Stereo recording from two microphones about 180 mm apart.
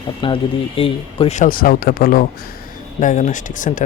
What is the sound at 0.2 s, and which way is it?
Speech, 25° left (ahead or behind).